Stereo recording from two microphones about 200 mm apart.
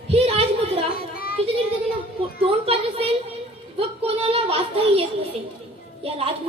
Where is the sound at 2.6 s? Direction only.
30° right (ahead or behind).